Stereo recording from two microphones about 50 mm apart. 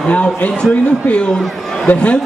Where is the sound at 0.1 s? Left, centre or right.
Left.